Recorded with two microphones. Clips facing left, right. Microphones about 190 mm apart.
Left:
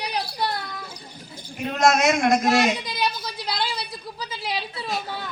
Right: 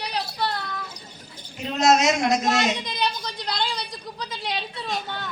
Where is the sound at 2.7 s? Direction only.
5° left (ahead or behind).